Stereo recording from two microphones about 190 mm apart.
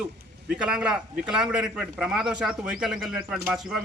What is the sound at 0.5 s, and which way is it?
A man's voice, 5° right (ahead or behind).